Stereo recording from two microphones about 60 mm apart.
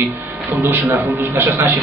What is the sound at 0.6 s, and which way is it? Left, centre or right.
Speech, right.